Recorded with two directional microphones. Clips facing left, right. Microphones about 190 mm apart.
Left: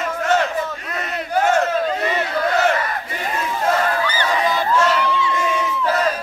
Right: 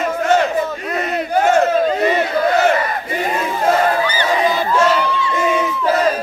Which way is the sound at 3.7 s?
20° right (ahead or behind).